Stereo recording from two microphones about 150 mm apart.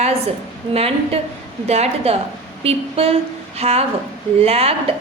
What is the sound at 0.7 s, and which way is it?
A woman's voice, 40° right (ahead or behind).